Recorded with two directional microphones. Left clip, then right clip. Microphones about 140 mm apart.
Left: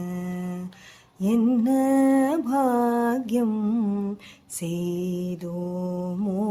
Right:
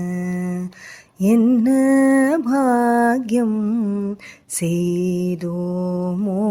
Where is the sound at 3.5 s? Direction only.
15° right (ahead or behind).